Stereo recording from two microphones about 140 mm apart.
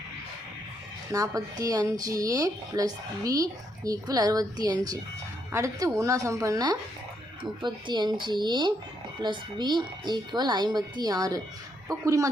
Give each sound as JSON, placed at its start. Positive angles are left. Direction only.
{"t": 1.1, "sound": "speech", "side_deg": -25}